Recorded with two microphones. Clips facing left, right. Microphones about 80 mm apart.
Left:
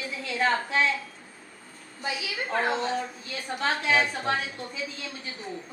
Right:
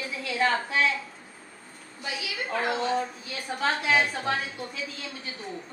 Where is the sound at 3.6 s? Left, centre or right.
Centre.